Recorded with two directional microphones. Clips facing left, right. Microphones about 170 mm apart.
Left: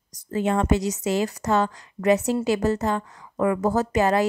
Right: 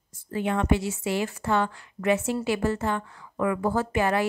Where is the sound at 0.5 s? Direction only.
40° left (ahead or behind).